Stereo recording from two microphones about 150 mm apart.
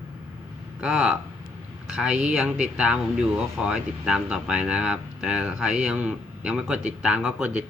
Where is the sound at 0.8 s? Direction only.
5° right (ahead or behind).